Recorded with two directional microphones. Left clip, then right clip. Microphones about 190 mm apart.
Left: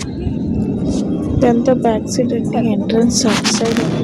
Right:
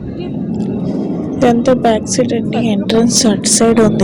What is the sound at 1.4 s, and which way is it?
A woman's voice, 20° right (ahead or behind).